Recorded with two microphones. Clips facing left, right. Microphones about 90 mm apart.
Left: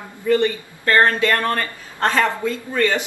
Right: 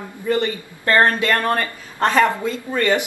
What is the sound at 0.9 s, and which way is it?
A man's voice, 20° right (ahead or behind).